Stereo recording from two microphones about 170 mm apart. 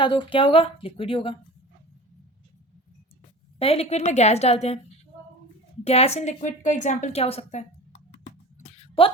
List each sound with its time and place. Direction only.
0.0 s a woman's voice: 30° left (ahead or behind)
3.6 s a woman's voice: 35° left (ahead or behind)
5.8 s a woman's voice: 40° left (ahead or behind)
8.7 s a sound: 35° left (ahead or behind)